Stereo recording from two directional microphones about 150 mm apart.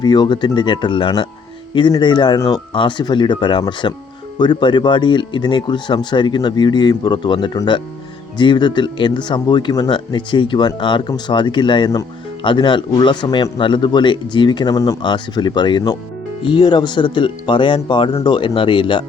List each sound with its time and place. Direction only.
0.0 s speech: 30° left (ahead or behind)